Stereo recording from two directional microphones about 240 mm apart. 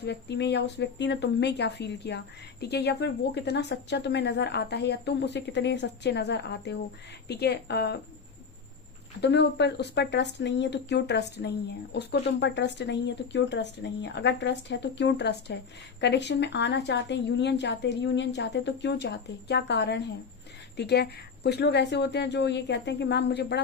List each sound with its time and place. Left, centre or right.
0.0 s speech: left
9.2 s speech: left